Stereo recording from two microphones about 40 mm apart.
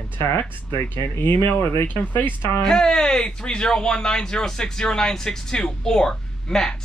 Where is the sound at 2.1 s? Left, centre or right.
Left.